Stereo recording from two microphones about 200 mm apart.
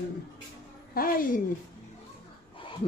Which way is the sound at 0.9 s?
45° left (ahead or behind).